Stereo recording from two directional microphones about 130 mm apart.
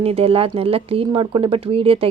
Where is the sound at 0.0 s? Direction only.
50° right (ahead or behind).